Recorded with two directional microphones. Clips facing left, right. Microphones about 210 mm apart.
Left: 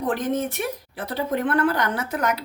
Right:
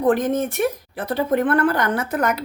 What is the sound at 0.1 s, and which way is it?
Speech, 50° right (ahead or behind).